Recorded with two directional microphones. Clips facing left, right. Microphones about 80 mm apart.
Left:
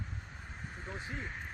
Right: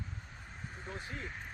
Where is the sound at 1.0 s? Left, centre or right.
Centre.